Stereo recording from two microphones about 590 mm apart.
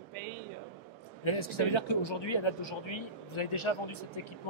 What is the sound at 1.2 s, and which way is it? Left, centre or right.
Speech, left.